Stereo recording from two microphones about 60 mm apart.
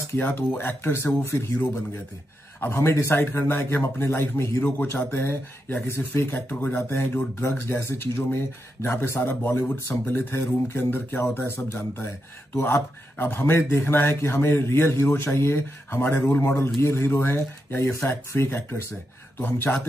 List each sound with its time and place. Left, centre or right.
0.2 s a man's voice: left
0.9 s a man's voice: left
6.2 s a man's voice: left
7.4 s a man's voice: left